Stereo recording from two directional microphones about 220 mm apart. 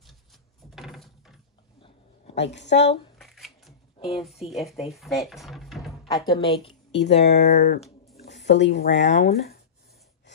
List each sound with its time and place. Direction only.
0.7 s a sound: centre (ahead or behind)
2.3 s a woman's voice: 50° left (ahead or behind)
3.2 s speech: centre (ahead or behind)
6.3 s a woman's voice: 25° left (ahead or behind)
6.9 s a woman's voice: 50° left (ahead or behind)